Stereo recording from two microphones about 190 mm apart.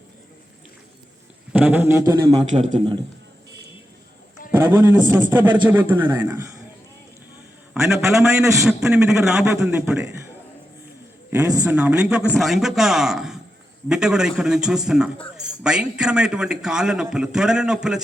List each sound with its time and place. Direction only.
1.5 s speech: 10° right (ahead or behind)
2.5 s a man's voice: 40° right (ahead or behind)
2.7 s a man's voice: 25° right (ahead or behind)
4.5 s a man's voice: 10° right (ahead or behind)
7.7 s a man's voice: 5° right (ahead or behind)
11.3 s a man's voice: 10° right (ahead or behind)